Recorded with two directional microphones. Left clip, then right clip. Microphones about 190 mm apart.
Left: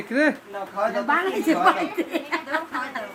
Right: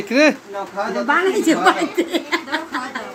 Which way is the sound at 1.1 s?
20° right (ahead or behind).